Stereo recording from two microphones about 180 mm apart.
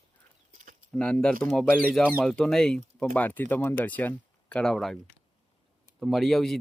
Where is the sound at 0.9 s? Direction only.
5° left (ahead or behind).